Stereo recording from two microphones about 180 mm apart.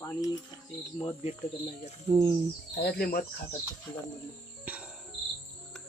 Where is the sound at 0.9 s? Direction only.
35° left (ahead or behind).